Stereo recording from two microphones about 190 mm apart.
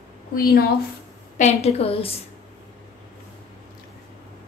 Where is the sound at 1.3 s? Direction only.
35° left (ahead or behind).